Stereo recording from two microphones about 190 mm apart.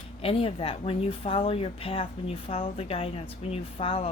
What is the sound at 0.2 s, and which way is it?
Speech, 30° left (ahead or behind).